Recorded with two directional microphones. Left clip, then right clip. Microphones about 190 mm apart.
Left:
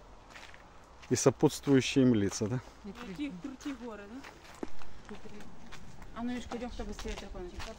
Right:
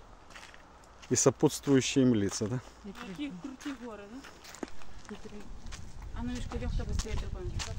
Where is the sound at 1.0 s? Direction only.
Centre (ahead or behind).